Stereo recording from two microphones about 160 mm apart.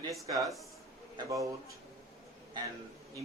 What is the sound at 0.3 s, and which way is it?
A man's voice, 20° right (ahead or behind).